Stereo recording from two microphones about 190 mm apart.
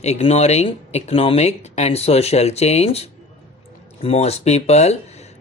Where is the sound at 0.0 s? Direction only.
35° left (ahead or behind).